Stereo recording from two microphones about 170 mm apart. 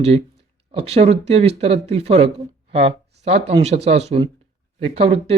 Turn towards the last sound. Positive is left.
turn(degrees=-35)  # may be behind; listen again after turning